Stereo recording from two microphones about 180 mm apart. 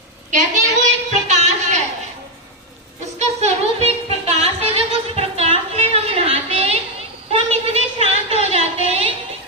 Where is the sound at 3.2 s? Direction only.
35° right (ahead or behind).